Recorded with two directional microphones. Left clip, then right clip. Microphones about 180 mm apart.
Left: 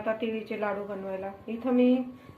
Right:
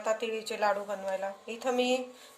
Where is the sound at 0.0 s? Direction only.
70° right (ahead or behind).